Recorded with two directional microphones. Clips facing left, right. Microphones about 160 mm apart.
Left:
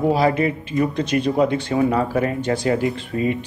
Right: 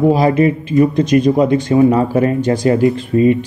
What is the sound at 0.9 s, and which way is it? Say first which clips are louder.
Speech: right 8 dB; 45° right (ahead or behind).